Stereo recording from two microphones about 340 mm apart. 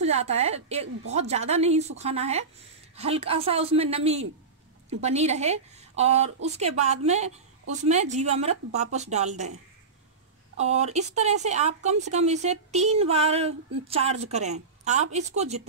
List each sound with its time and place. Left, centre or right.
0.0 s a woman's voice: centre
10.6 s speech: centre